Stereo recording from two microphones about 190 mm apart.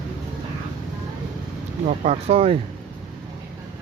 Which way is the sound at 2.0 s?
30° right (ahead or behind).